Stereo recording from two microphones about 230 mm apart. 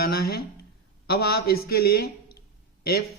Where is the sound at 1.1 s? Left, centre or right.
Left.